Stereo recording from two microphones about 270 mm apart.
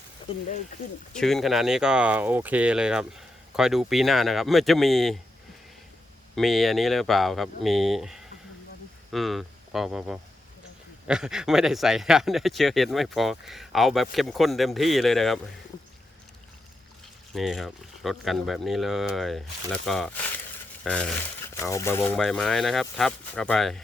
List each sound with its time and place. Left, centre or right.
0.2 s a sound: left
1.1 s speech: centre
6.3 s speech: centre
17.3 s speech: centre